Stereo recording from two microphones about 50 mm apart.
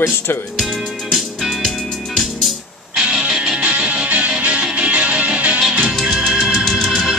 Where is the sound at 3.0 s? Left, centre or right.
Centre.